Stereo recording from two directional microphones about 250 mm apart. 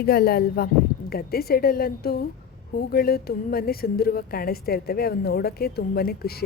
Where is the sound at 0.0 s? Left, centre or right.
Left.